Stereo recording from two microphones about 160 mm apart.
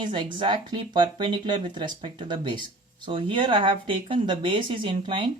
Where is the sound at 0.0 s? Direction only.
30° right (ahead or behind).